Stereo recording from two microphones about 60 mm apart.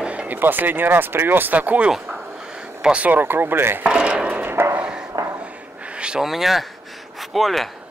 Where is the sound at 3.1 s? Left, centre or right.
Right.